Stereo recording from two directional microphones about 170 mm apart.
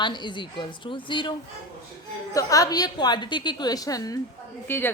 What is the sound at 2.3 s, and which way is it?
A woman's voice, 20° left (ahead or behind).